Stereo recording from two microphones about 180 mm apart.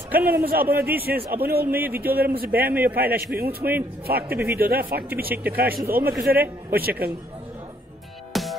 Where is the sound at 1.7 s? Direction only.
10° right (ahead or behind).